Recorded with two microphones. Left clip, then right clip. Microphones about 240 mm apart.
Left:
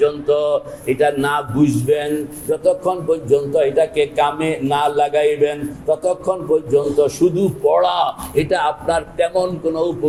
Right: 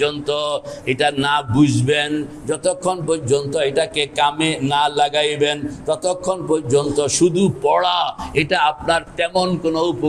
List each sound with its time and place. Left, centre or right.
0.0 s speech: right